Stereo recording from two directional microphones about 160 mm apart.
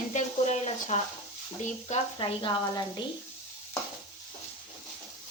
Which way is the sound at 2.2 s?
30° left (ahead or behind).